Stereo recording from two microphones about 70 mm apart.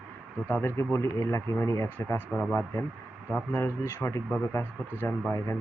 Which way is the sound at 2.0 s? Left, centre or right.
Left.